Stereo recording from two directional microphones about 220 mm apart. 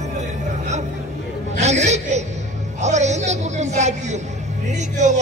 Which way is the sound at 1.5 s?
30° right (ahead or behind).